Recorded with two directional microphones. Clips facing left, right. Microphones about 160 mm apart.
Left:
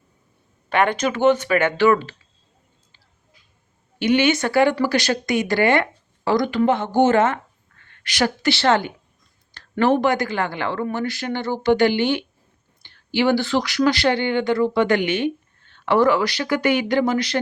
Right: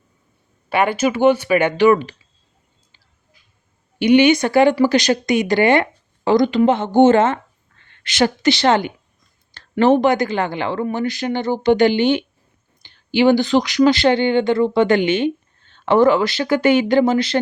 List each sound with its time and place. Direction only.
0.7 s speech: 5° right (ahead or behind)
4.0 s a woman's voice: 15° right (ahead or behind)